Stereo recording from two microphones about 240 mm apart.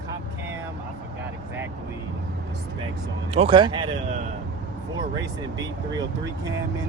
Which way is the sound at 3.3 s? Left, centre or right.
Right.